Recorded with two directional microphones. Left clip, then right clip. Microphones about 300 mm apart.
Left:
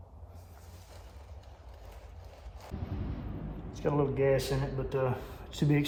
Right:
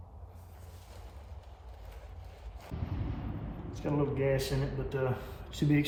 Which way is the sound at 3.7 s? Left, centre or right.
Centre.